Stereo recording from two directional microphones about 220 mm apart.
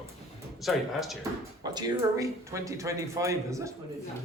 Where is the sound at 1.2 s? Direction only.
20° right (ahead or behind).